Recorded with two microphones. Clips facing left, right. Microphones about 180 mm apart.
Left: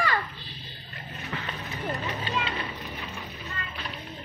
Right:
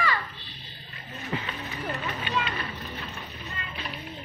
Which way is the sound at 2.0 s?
30° left (ahead or behind).